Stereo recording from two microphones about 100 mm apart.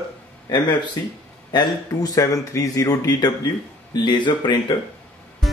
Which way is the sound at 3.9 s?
50° left (ahead or behind).